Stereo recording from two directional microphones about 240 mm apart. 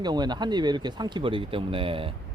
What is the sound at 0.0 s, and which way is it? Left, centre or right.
Speech, centre.